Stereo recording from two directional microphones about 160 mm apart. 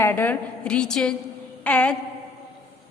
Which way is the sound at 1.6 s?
10° left (ahead or behind).